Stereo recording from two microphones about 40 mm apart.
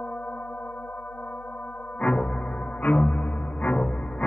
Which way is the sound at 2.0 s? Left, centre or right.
Left.